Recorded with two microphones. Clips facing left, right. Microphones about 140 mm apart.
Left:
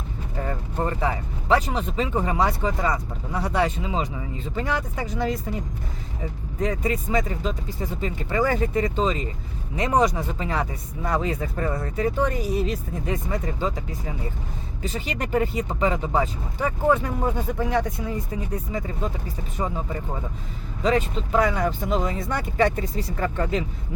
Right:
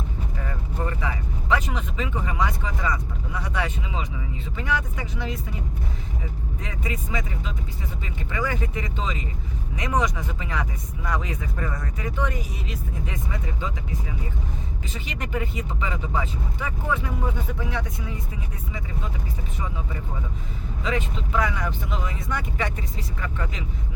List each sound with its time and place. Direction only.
0.3 s speech: 35° left (ahead or behind)
6.6 s speech: 40° left (ahead or behind)
14.8 s speech: 40° left (ahead or behind)
19.5 s speech: 40° left (ahead or behind)